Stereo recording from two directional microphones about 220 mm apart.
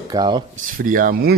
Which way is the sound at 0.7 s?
40° right (ahead or behind).